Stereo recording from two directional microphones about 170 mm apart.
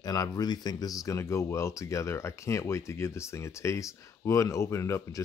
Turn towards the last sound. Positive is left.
turn(degrees=15)  # may be behind; listen again after turning